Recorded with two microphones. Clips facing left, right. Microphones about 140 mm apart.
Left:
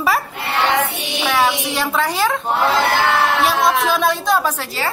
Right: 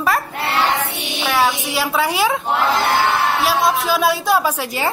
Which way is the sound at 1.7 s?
5° right (ahead or behind).